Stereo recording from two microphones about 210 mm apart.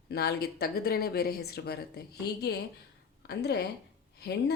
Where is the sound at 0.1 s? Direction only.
50° left (ahead or behind).